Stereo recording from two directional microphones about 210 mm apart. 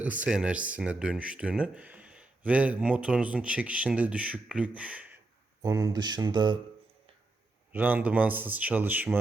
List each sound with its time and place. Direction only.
0.2 s speech: 5° right (ahead or behind)
5.6 s speech: 15° right (ahead or behind)
7.7 s speech: 10° right (ahead or behind)